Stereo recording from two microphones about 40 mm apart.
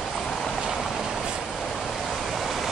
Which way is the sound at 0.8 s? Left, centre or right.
Centre.